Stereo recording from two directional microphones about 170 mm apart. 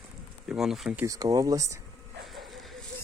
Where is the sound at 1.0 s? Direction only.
20° right (ahead or behind).